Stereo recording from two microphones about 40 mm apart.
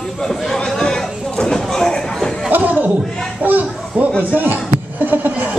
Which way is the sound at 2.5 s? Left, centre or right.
Right.